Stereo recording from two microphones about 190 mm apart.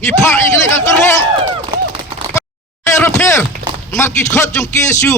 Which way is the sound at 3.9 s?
15° left (ahead or behind).